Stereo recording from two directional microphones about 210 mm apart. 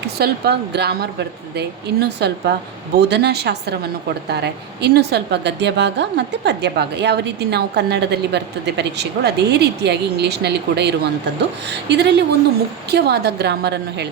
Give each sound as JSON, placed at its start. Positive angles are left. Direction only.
{"t": 0.2, "sound": "a woman's voice", "side_deg": -50}